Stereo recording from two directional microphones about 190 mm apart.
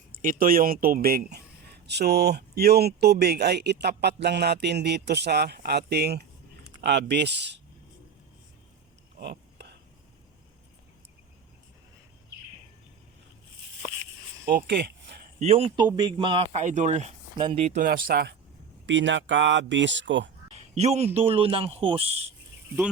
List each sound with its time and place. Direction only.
0.2 s speech: 45° right (ahead or behind); by 7.6 s 65° right (ahead or behind)
9.1 s a sound: 55° right (ahead or behind)
14.7 s speech: 65° right (ahead or behind)
15.4 s a man's voice: 30° right (ahead or behind)
16.6 s a man's voice: 40° right (ahead or behind)
17.3 s a man's voice: 25° right (ahead or behind)
17.8 s speech: 50° right (ahead or behind)
18.9 s speech: 70° right (ahead or behind)
20.5 s a man's voice: 35° right (ahead or behind)